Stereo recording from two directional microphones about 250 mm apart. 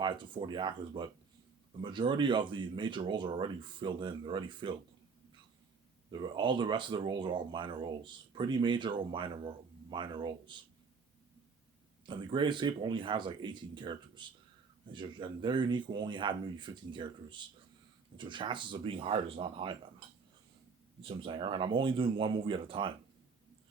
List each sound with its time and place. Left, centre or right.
0.0 s speech: centre
6.1 s speech: centre
12.0 s speech: centre
21.0 s speech: centre